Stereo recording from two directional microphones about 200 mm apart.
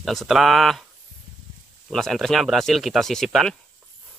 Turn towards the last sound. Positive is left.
turn(degrees=0)  # may be behind; listen again after turning